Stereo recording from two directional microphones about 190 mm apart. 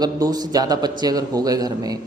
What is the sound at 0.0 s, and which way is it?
A man's voice, 20° right (ahead or behind).